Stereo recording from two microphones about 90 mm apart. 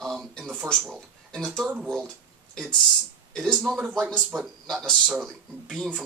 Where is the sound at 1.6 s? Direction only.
15° right (ahead or behind).